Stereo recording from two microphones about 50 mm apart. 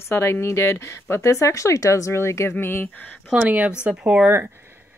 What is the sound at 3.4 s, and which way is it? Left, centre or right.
Speech, right.